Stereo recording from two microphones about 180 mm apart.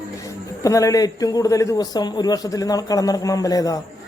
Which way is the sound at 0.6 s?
20° left (ahead or behind).